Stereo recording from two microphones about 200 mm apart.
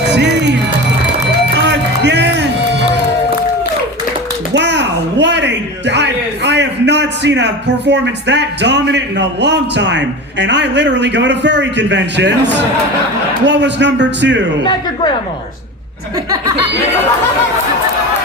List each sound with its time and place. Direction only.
0.1 s music: 60° right (ahead or behind)
1.5 s music: 60° right (ahead or behind)
4.5 s a man's voice: 60° right (ahead or behind)
14.6 s a woman's voice: 25° left (ahead or behind)